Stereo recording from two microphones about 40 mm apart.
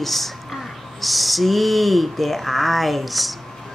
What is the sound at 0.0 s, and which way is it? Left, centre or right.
A woman's voice, centre.